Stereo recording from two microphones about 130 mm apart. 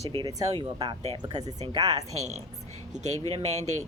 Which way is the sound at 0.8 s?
45° right (ahead or behind).